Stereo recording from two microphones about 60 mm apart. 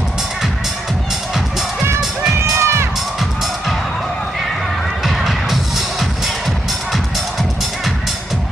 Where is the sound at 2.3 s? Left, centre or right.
Right.